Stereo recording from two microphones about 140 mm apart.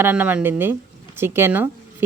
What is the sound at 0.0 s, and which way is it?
Speech, 10° right (ahead or behind).